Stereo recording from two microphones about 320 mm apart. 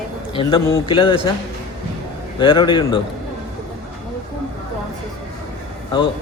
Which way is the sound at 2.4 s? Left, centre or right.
Centre.